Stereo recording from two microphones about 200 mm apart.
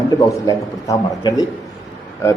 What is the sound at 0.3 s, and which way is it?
A man's voice, 15° left (ahead or behind).